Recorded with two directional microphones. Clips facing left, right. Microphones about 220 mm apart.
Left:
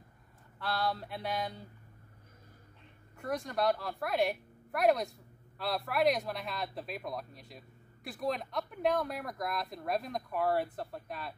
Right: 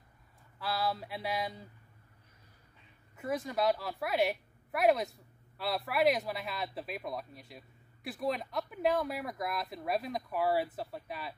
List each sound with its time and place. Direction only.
0.6 s speech: centre (ahead or behind)
3.2 s speech: 5° right (ahead or behind)